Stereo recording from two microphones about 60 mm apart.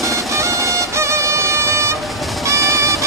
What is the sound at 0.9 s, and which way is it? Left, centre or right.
Music, right.